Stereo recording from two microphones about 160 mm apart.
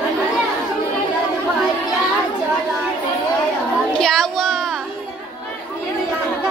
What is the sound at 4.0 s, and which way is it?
Child singing, 5° left (ahead or behind).